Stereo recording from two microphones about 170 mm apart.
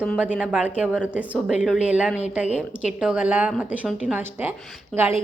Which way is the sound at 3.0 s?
5° right (ahead or behind).